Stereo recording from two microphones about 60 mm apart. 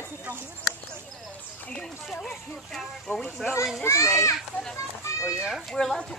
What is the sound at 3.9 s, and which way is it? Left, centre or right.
Speech, left.